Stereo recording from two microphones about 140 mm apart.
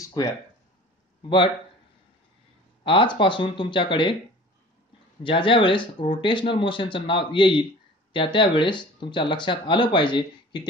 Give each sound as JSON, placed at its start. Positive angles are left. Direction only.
{"t": 0.0, "sound": "a sound", "side_deg": 25}
{"t": 2.8, "sound": "speech", "side_deg": 35}
{"t": 5.2, "sound": "speech", "side_deg": 35}